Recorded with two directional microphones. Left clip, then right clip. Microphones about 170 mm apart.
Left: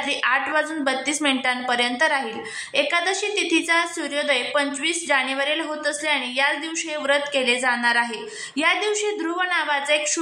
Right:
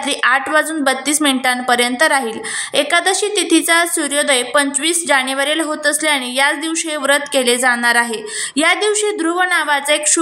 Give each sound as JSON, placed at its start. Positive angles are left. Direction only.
{"t": 0.2, "sound": "a woman's voice", "side_deg": -30}